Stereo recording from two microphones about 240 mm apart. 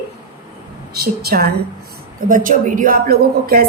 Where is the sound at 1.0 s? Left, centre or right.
Right.